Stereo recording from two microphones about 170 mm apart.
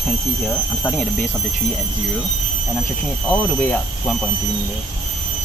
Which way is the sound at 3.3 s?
10° left (ahead or behind).